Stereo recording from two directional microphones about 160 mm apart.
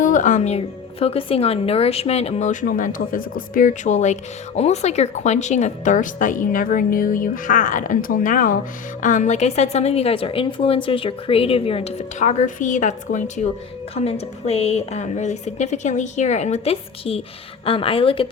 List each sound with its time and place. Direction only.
0.0 s a woman's voice: 55° left (ahead or behind); by 18.3 s 35° left (ahead or behind)